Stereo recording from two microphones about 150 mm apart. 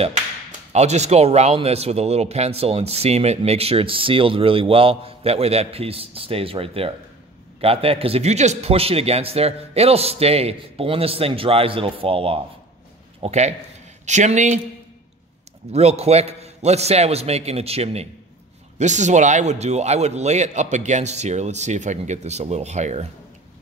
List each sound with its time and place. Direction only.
0.7 s speech: 50° right (ahead or behind)
15.7 s speech: 45° right (ahead or behind)